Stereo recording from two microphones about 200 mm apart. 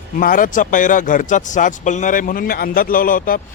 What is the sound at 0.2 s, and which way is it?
Speech, 40° left (ahead or behind).